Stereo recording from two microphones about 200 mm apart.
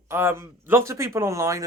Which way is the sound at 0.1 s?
10° right (ahead or behind).